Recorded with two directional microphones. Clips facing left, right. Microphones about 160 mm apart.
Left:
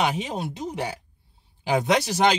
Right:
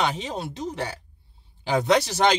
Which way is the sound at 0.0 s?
15° left (ahead or behind).